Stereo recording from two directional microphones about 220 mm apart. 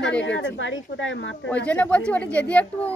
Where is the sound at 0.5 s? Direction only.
60° left (ahead or behind).